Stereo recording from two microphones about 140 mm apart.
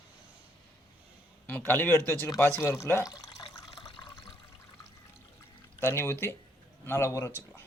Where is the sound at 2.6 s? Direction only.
20° left (ahead or behind).